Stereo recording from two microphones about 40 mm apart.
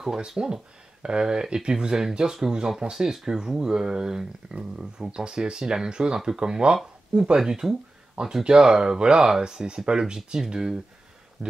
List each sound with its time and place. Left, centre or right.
0.4 s speech: right